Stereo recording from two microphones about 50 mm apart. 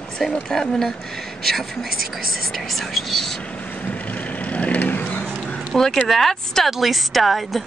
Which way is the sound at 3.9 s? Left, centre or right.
Left.